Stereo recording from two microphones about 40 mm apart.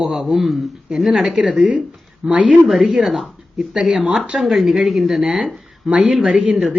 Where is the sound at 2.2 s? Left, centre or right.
Right.